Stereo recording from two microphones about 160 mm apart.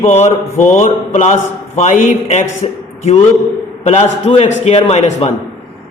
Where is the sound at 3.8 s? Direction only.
40° left (ahead or behind).